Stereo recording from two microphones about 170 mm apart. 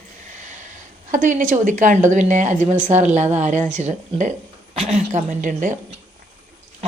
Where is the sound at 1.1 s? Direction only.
50° right (ahead or behind).